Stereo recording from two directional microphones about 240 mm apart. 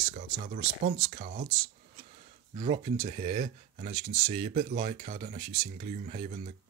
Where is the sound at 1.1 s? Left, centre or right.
Right.